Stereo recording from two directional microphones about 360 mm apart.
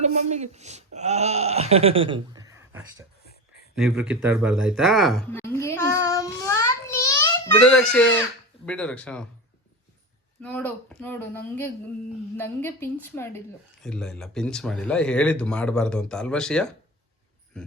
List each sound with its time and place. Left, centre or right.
0.0 s speech: centre
10.4 s speech: centre